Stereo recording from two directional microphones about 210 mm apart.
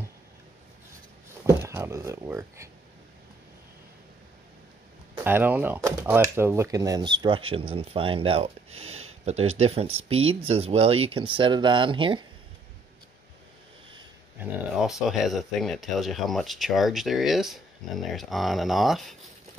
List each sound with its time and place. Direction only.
1.4 s speech: 10° right (ahead or behind)
5.1 s speech: 10° right (ahead or behind)
14.4 s speech: centre (ahead or behind)